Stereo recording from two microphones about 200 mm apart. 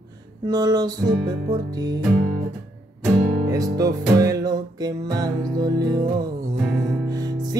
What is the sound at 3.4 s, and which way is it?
Music, 20° right (ahead or behind).